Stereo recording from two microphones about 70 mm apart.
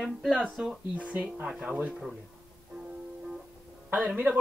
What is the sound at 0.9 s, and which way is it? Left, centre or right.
Speech, centre.